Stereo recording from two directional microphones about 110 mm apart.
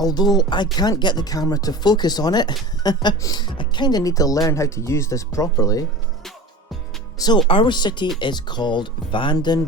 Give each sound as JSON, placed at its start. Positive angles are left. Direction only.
{"t": 0.0, "sound": "speech", "side_deg": 35}
{"t": 7.4, "sound": "speech", "side_deg": 55}